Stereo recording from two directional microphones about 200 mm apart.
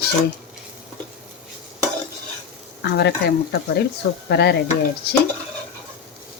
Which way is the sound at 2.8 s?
55° left (ahead or behind).